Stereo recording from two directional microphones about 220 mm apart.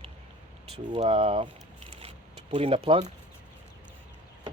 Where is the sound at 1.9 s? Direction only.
25° right (ahead or behind).